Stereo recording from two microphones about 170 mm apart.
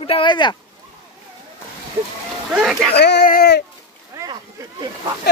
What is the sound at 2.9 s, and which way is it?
Speech, 80° left.